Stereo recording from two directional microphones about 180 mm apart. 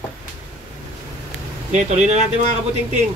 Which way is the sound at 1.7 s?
40° right (ahead or behind).